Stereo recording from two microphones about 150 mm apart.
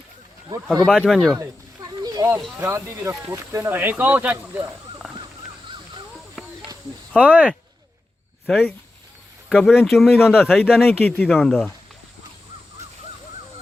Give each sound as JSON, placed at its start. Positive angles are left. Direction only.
{"t": 0.9, "sound": "speech", "side_deg": 0}
{"t": 2.2, "sound": "speech", "side_deg": -25}
{"t": 5.6, "sound": "a sound", "side_deg": -35}
{"t": 7.2, "sound": "speech", "side_deg": -10}
{"t": 8.4, "sound": "speech", "side_deg": 0}
{"t": 11.0, "sound": "speech", "side_deg": 10}